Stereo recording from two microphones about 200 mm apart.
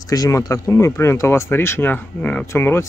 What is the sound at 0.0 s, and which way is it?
Speech, 20° left (ahead or behind).